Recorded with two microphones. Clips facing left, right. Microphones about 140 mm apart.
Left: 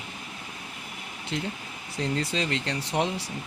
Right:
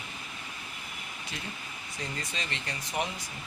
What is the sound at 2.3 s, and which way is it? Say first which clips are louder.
Speech: left 9 dB; 80° left.